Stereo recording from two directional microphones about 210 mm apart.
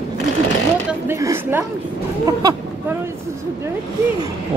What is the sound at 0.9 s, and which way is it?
Speech, 15° right (ahead or behind).